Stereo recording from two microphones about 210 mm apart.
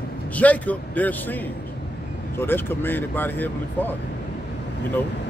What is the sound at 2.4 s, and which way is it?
Speech, 10° left (ahead or behind).